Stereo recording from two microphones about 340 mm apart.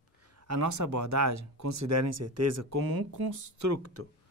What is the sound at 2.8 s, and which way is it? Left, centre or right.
Speech, right.